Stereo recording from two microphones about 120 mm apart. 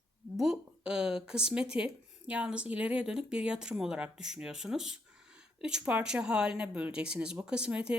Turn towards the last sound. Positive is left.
turn(degrees=-10)  # may be behind; listen again after turning